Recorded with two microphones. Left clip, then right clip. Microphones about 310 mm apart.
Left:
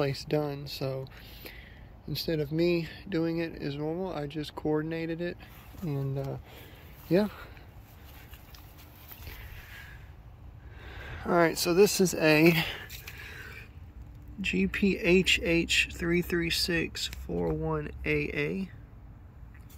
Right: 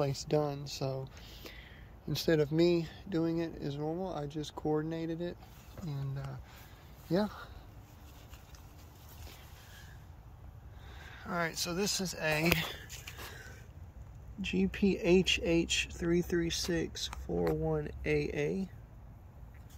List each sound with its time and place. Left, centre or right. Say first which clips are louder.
0.0 s speech: left 2 dB; centre
6.1 s speech: left 11 dB; centre
11.1 s speech: left 10 dB; centre
14.4 s speech: left 4 dB; centre